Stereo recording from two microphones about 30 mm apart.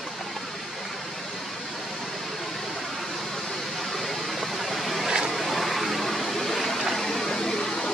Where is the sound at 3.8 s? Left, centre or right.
Centre.